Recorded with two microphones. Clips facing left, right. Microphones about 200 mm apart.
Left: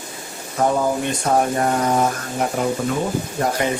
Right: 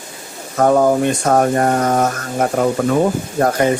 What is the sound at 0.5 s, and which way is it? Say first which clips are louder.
Speech: right 6 dB; 55° right (ahead or behind).